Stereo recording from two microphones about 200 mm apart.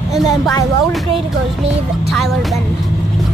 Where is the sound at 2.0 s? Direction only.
Centre (ahead or behind).